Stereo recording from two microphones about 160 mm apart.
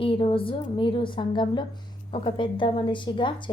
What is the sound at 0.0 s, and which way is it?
A woman's voice, 35° left (ahead or behind).